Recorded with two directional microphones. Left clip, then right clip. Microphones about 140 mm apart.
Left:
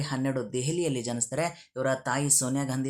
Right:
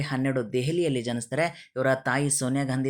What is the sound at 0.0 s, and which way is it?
Speech, 15° right (ahead or behind).